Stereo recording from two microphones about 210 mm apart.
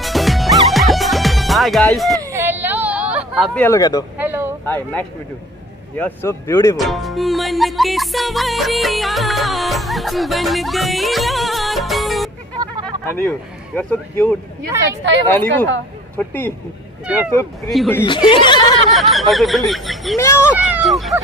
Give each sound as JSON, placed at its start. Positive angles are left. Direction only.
{"t": 0.0, "sound": "music", "side_deg": 0}
{"t": 2.1, "sound": "a sound", "side_deg": -15}
{"t": 4.2, "sound": "a sound", "side_deg": -10}
{"t": 4.6, "sound": "speech", "side_deg": 10}
{"t": 6.8, "sound": "music", "side_deg": 0}
{"t": 12.8, "sound": "a sound", "side_deg": 10}
{"t": 13.7, "sound": "speech", "side_deg": 5}
{"t": 16.2, "sound": "speech", "side_deg": 10}
{"t": 17.6, "sound": "music", "side_deg": 0}
{"t": 18.0, "sound": "speech", "side_deg": 25}
{"t": 18.9, "sound": "music", "side_deg": 0}
{"t": 20.2, "sound": "speech", "side_deg": 10}
{"t": 20.5, "sound": "music", "side_deg": -5}